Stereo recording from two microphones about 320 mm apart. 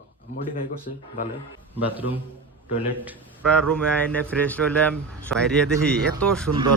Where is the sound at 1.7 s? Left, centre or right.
Centre.